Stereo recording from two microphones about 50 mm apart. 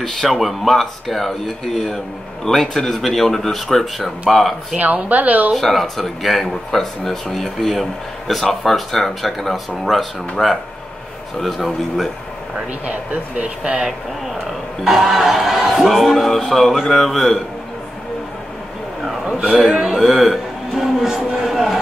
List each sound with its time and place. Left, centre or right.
0.0 s speech: centre
4.7 s a woman's voice: right
5.5 s speech: centre
10.4 s speech: centre
11.4 s speech: centre
12.8 s speech: right
14.9 s speech: centre
19.7 s a sound: centre